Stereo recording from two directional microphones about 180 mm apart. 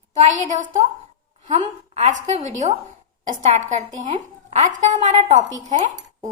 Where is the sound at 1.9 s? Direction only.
35° right (ahead or behind).